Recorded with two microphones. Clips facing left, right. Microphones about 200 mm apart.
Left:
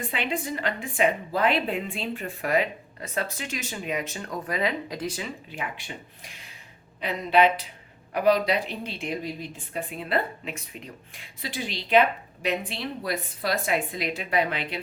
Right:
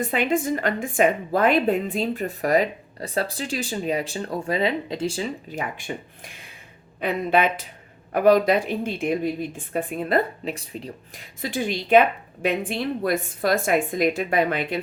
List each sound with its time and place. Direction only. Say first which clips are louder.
0.0 s a woman's voice: right 7 dB; 45° right (ahead or behind)